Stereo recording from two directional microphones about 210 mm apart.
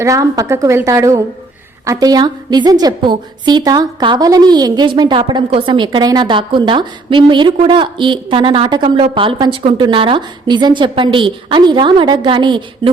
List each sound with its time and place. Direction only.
0.0 s a woman's voice: 15° right (ahead or behind)